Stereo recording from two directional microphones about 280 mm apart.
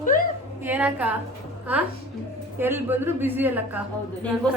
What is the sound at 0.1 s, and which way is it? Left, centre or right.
Speech, left.